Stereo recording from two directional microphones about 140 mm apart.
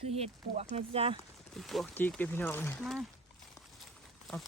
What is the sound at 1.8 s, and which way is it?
Speech, 15° left (ahead or behind).